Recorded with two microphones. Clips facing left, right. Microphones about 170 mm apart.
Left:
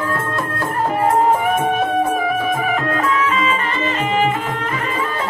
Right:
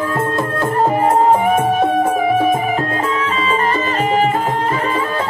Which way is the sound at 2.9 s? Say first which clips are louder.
Left 1 dB; 30° right (ahead or behind).